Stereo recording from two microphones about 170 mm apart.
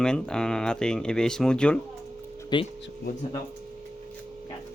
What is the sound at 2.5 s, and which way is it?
Speech, 25° left (ahead or behind).